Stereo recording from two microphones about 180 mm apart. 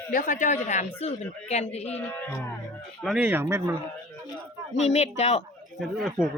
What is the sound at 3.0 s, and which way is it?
Speech, 5° right (ahead or behind).